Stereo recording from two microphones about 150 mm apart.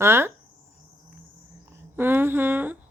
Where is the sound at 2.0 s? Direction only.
15° right (ahead or behind).